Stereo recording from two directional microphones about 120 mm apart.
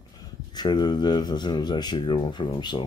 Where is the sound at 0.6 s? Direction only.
40° left (ahead or behind).